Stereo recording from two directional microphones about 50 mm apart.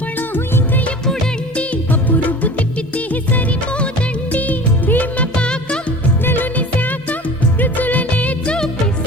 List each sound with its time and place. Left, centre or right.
0.2 s music of bollywood: left
1.5 s music of bollywood: left
4.3 s music of bollywood: left
6.2 s music: left
7.6 s music of bollywood: left